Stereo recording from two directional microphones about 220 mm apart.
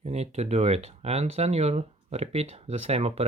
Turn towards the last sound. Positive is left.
turn(degrees=-30)  # may be behind; listen again after turning